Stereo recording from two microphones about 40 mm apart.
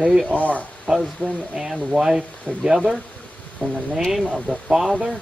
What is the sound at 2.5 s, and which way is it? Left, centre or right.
Speech, left.